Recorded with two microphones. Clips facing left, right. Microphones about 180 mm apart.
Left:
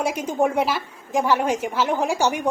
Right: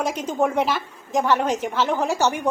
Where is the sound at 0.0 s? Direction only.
10° left (ahead or behind).